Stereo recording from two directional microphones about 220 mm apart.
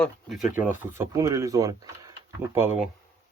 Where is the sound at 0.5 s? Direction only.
10° right (ahead or behind).